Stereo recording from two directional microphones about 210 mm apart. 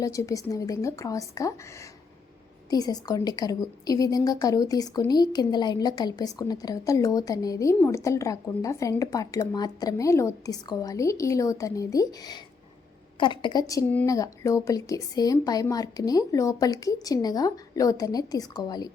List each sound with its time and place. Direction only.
0.0 s a woman's voice: 15° left (ahead or behind)